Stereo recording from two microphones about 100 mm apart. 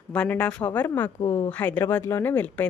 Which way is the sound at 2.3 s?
15° left (ahead or behind).